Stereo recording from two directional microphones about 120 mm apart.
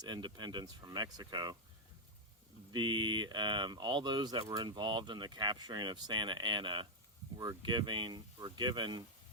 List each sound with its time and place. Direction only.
0.0 s speech: 35° right (ahead or behind)
2.7 s speech: 40° right (ahead or behind)